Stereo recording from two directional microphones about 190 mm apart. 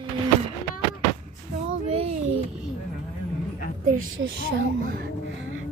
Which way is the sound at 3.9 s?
90° right.